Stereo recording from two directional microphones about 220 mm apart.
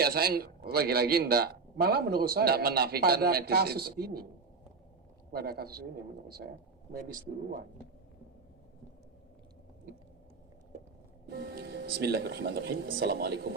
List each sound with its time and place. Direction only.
0.0 s a man's voice: 45° right (ahead or behind)
5.3 s a man's voice: 45° right (ahead or behind)
7.1 s speech: 40° right (ahead or behind)
11.3 s a man's voice: 45° right (ahead or behind)